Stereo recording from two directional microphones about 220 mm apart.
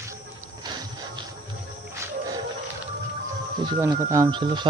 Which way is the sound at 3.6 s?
15° right (ahead or behind).